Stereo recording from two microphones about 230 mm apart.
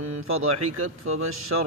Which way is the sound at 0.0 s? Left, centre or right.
Right.